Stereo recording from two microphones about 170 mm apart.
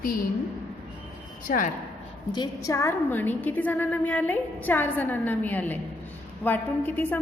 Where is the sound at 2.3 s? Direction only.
20° left (ahead or behind).